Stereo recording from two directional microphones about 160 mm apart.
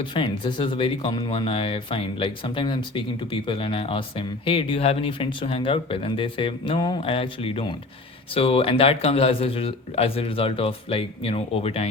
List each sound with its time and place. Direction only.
0.0 s speech: 30° left (ahead or behind)